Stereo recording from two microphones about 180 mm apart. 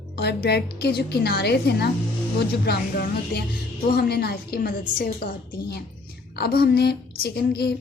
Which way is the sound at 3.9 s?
60° left (ahead or behind).